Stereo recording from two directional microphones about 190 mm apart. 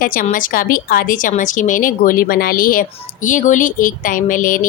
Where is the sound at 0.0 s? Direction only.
45° left (ahead or behind).